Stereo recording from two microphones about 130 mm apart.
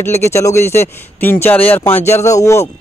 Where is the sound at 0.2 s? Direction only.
25° left (ahead or behind).